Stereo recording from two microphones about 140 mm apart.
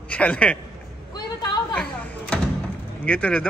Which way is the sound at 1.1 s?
30° left (ahead or behind).